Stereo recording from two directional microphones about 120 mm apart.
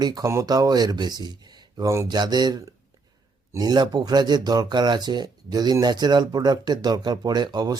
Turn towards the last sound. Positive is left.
turn(degrees=-35)  # may be behind; listen again after turning